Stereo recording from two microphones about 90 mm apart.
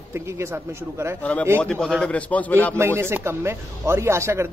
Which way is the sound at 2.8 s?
30° right (ahead or behind).